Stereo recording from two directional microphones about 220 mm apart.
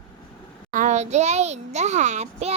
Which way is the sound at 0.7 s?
35° right (ahead or behind).